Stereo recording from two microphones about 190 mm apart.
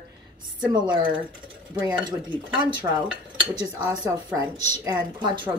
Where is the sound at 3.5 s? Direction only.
20° right (ahead or behind).